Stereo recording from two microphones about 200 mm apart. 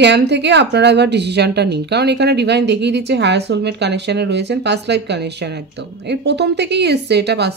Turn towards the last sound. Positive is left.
turn(degrees=-55)  # may be behind; listen again after turning